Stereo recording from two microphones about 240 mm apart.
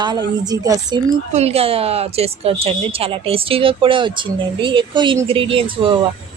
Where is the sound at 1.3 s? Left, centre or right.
Right.